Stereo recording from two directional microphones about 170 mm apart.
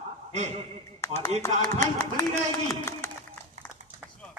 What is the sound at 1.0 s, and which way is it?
Speech, 15° left (ahead or behind).